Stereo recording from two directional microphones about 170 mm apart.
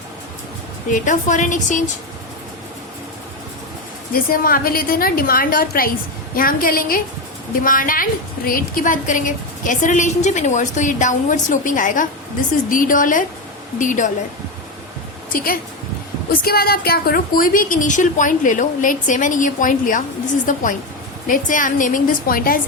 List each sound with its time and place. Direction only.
0.9 s a woman's voice: 50° left (ahead or behind)
4.1 s a woman's voice: 60° left (ahead or behind)
15.3 s a woman's voice: 55° left (ahead or behind)